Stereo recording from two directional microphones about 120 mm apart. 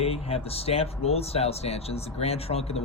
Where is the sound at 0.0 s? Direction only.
55° left (ahead or behind).